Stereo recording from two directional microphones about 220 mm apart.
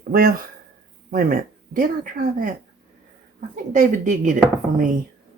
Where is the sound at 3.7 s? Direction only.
35° right (ahead or behind).